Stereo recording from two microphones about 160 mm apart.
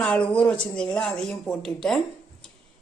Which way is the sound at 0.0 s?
5° left (ahead or behind).